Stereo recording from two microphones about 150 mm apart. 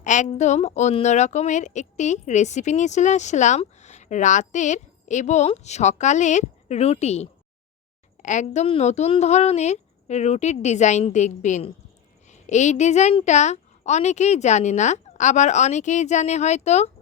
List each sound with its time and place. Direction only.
0.0 s a woman's voice: 55° left (ahead or behind)